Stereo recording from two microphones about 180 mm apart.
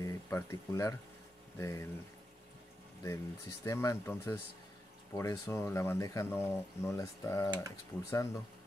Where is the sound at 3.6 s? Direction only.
15° left (ahead or behind).